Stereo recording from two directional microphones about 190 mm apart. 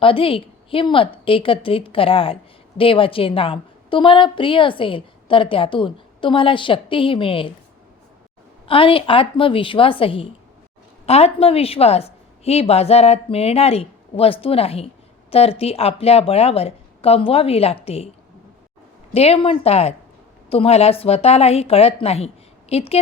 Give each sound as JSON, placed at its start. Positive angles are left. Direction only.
{"t": 0.0, "sound": "a woman's voice", "side_deg": 30}
{"t": 8.6, "sound": "a woman's voice", "side_deg": 30}
{"t": 19.1, "sound": "a woman's voice", "side_deg": 30}